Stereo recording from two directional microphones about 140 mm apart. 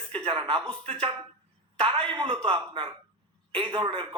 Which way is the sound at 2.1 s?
35° right (ahead or behind).